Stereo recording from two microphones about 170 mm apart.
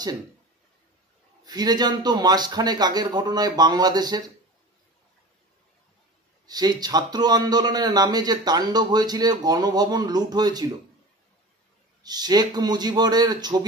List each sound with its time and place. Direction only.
1.4 s a man's voice: 25° right (ahead or behind)
6.4 s a man's voice: 25° right (ahead or behind)
12.0 s a man's voice: 25° right (ahead or behind)